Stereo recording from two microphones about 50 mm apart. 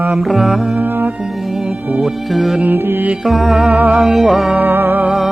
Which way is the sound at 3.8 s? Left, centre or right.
Right.